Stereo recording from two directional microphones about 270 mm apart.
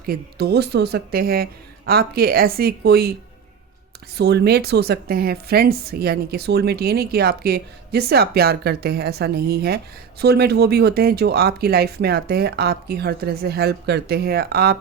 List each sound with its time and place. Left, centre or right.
0.0 s a woman's voice: right
4.2 s a woman's voice: right